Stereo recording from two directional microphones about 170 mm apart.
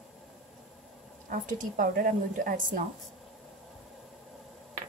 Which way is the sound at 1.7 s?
50° right (ahead or behind).